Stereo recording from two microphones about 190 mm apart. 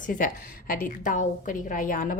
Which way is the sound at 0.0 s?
45° left (ahead or behind).